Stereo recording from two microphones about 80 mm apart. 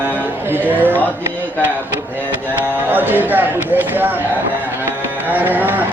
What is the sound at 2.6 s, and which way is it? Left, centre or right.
Speech, right.